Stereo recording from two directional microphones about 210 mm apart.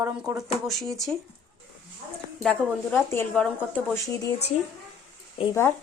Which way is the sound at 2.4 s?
5° left (ahead or behind).